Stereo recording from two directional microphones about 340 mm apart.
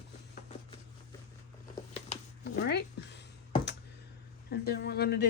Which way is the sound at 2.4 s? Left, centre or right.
Left.